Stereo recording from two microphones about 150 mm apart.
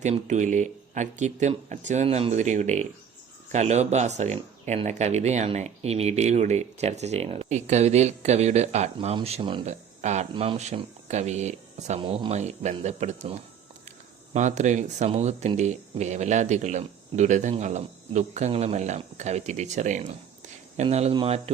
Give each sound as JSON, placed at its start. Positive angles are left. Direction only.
{"t": 0.0, "sound": "speech", "side_deg": -50}
{"t": 9.6, "sound": "speech", "side_deg": -50}